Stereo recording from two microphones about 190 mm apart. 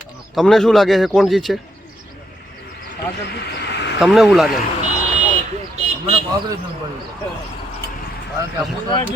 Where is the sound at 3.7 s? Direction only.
65° left (ahead or behind).